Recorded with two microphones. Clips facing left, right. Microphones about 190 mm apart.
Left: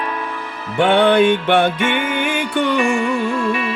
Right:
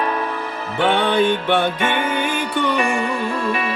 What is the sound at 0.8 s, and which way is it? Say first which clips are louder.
Music: left 4 dB; 70° left (ahead or behind).